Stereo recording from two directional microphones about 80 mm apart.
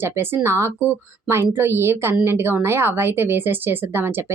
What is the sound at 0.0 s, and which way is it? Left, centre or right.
A woman's voice, right.